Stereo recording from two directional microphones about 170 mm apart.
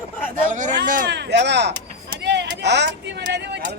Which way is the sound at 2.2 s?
90° right.